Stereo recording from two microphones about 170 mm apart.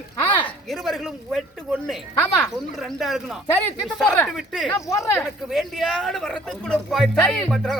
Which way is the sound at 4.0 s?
10° left (ahead or behind).